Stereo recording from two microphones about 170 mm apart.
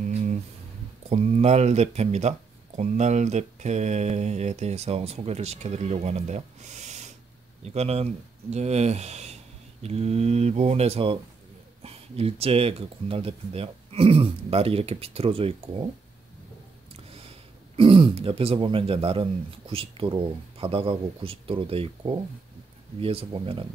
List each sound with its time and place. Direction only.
0.1 s a sound: 40° right (ahead or behind)
1.0 s speech: 40° right (ahead or behind)
17.7 s speech: 30° right (ahead or behind)